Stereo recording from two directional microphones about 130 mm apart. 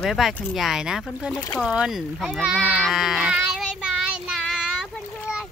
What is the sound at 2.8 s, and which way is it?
Child singing, centre (ahead or behind).